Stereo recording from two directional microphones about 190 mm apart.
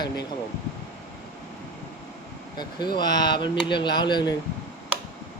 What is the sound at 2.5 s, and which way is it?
Speech, 25° left (ahead or behind).